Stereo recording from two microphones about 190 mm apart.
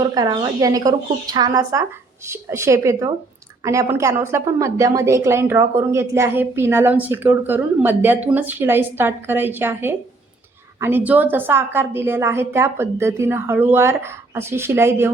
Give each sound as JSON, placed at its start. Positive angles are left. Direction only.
{"t": 0.0, "sound": "a woman's voice", "side_deg": -20}